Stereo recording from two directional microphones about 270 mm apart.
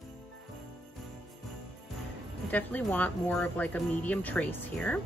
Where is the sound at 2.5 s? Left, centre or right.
Centre.